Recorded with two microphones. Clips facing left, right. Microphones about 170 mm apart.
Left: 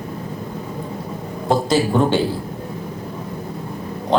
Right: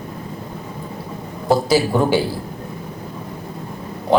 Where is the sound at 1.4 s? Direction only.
5° right (ahead or behind).